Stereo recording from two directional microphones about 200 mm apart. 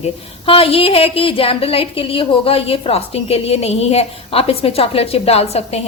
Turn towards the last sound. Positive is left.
turn(degrees=30)  # may be behind; listen again after turning